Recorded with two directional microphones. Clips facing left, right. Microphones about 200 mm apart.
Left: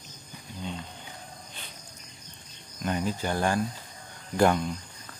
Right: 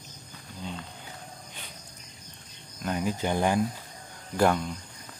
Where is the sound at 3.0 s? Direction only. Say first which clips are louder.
Right 3 dB; 15° right (ahead or behind).